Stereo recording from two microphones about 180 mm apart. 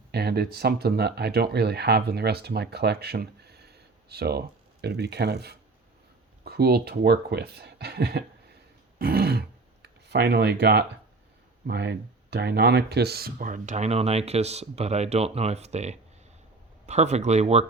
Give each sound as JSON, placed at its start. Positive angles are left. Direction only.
{"t": 0.1, "sound": "speech", "side_deg": -60}
{"t": 9.0, "sound": "a sound", "side_deg": -60}
{"t": 11.6, "sound": "speech", "side_deg": -70}